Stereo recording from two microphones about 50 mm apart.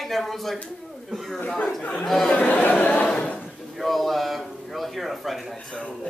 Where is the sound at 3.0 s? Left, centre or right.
Centre.